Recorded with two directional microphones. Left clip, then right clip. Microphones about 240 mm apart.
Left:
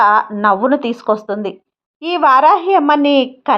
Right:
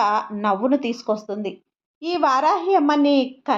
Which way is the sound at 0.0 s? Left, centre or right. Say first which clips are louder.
Left 9 dB; left.